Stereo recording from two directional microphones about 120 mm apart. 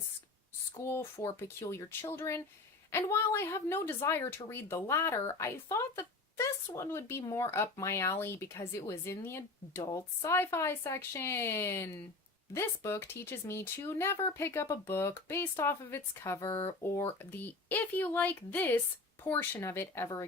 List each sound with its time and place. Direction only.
0.8 s speech: 20° left (ahead or behind)